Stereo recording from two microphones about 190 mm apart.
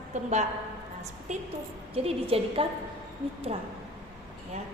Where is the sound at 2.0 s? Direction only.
30° right (ahead or behind).